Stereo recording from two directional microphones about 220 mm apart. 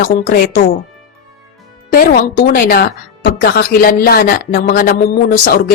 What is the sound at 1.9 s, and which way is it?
A woman's voice, 40° left (ahead or behind).